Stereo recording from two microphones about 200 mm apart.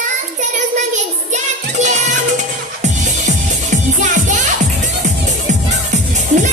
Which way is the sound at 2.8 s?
35° right (ahead or behind).